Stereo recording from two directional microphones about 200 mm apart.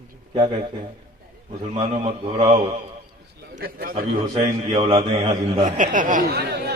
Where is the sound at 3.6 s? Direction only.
50° right (ahead or behind).